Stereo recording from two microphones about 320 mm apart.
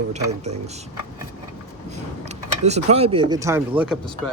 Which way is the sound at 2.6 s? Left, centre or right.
Right.